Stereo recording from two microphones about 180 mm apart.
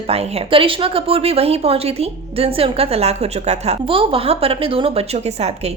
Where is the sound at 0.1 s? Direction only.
35° right (ahead or behind).